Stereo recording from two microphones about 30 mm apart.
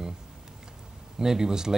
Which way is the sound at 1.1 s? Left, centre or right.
Centre.